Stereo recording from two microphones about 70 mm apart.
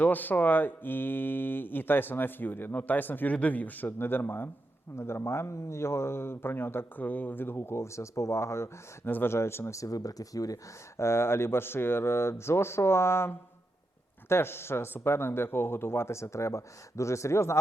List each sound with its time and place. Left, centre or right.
0.0 s speech: left
10.9 s speech: left